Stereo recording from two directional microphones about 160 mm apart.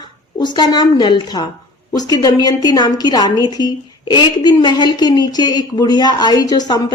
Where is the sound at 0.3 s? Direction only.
25° left (ahead or behind).